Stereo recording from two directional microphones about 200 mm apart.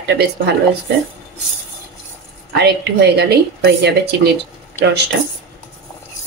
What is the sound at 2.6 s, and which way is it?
A woman's voice, 55° right (ahead or behind).